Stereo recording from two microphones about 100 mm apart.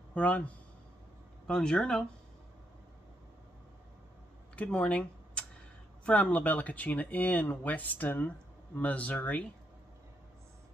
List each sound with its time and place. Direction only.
0.1 s speech: 15° left (ahead or behind)
1.5 s speech: 5° left (ahead or behind)
4.6 s speech: 10° left (ahead or behind)